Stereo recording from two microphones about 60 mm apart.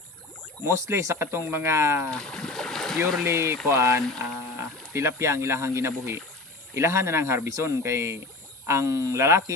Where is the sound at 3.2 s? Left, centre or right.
Right.